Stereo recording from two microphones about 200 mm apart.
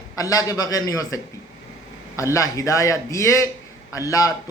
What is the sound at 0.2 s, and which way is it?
Speech, 20° left (ahead or behind).